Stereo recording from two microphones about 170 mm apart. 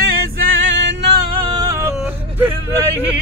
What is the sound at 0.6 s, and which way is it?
Music, 90° right.